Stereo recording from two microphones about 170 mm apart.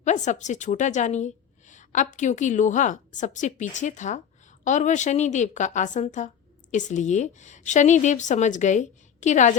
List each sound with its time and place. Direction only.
0.0 s a woman's voice: 45° left (ahead or behind)